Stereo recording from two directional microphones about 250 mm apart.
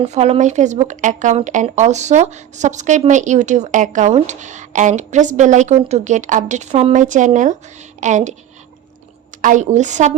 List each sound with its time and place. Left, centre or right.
0.0 s speech: right
9.4 s speech: right